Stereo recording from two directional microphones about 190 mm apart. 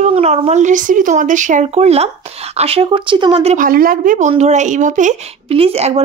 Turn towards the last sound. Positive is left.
turn(degrees=-35)  # may be behind; listen again after turning